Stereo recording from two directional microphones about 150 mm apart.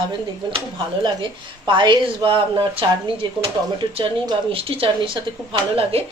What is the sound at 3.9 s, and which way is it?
A woman's voice, 35° right (ahead or behind).